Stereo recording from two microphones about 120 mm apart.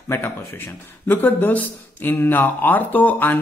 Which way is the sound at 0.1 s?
20° left (ahead or behind).